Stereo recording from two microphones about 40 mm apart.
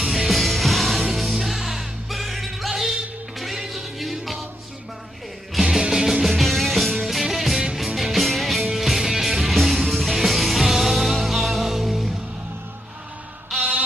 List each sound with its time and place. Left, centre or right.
0.0 s music: centre
5.5 s music: centre
13.6 s a sound: right